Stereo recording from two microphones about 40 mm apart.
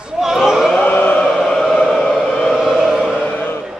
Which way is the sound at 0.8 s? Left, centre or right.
Left.